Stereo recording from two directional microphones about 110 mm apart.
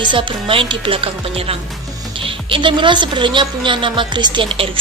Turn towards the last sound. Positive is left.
turn(degrees=-55)  # may be behind; listen again after turning